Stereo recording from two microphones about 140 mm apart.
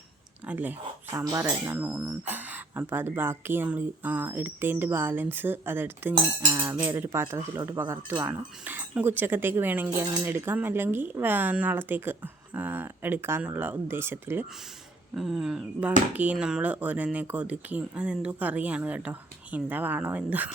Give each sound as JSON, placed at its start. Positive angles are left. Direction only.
{"t": 0.4, "sound": "speech", "side_deg": -10}
{"t": 1.2, "sound": "speech", "side_deg": -30}
{"t": 1.6, "sound": "speech", "side_deg": -15}
{"t": 8.6, "sound": "speech", "side_deg": -15}
{"t": 15.1, "sound": "speech", "side_deg": 0}